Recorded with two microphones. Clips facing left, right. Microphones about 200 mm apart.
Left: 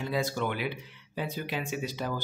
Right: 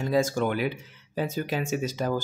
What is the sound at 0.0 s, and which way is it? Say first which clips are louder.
Speech: right 6 dB; 45° right (ahead or behind).